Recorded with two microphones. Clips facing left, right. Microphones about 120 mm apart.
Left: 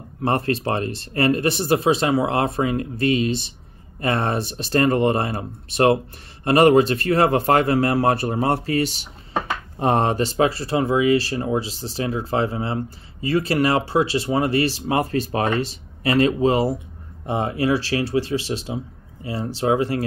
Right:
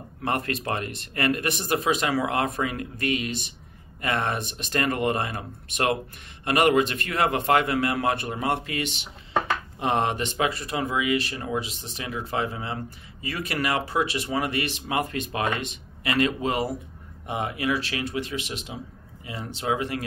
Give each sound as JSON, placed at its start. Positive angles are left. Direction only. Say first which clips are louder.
{"t": 0.2, "sound": "speech", "louder": "left 6 dB", "side_deg": 30}